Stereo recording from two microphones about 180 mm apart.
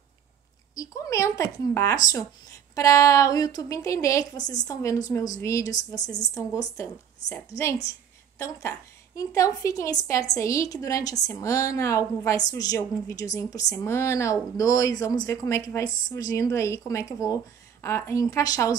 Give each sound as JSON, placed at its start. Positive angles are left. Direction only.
{"t": 0.7, "sound": "speech", "side_deg": 20}
{"t": 7.3, "sound": "speech", "side_deg": 15}